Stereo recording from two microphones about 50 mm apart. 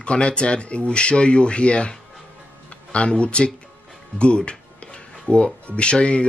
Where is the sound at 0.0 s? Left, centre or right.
Left.